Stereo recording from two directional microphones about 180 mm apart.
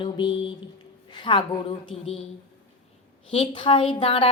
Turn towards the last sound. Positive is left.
turn(degrees=30)  # may be behind; listen again after turning